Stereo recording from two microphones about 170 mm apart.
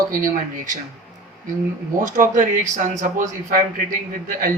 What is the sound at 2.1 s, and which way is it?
A man's voice, 50° right (ahead or behind).